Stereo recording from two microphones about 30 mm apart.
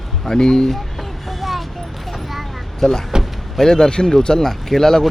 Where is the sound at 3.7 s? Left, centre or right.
Centre.